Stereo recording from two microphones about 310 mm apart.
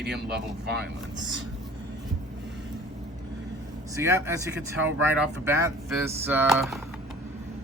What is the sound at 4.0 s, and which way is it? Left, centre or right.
Speech, centre.